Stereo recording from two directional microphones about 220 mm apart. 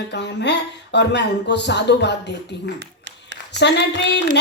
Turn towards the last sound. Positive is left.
turn(degrees=50)  # may be behind; listen again after turning